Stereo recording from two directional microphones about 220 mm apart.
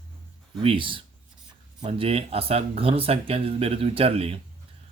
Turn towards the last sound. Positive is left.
turn(degrees=-25)  # may be behind; listen again after turning